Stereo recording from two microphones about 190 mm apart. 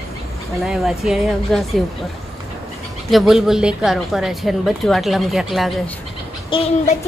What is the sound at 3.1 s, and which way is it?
A woman's voice, centre (ahead or behind).